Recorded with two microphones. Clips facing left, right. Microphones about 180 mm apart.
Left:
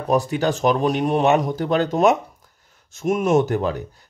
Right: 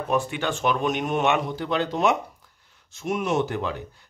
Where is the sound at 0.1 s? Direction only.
40° left (ahead or behind).